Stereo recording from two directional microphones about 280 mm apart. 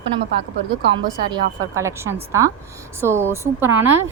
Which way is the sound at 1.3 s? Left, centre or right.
Centre.